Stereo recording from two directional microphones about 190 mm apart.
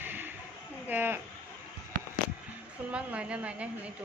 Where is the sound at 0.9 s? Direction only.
10° right (ahead or behind).